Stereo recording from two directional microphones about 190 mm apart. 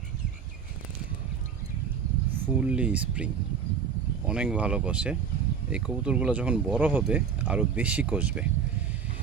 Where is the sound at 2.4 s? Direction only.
5° right (ahead or behind).